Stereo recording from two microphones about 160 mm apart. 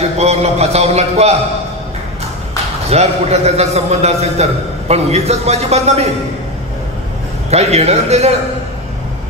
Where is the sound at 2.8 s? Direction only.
40° right (ahead or behind).